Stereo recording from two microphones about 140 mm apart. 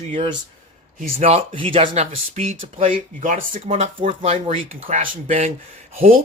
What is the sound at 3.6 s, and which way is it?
Speech, 45° right (ahead or behind).